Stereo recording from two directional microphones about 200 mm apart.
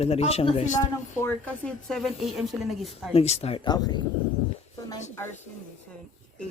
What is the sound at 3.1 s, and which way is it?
Speech, 30° left (ahead or behind).